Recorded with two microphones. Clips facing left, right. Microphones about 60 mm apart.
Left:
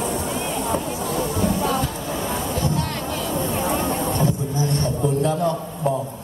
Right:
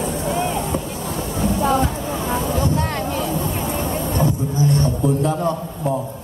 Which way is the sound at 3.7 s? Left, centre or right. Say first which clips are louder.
Left 1 dB; left.